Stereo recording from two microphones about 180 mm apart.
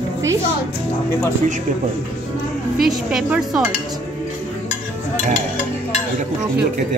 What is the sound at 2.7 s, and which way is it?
Speech, 5° right (ahead or behind).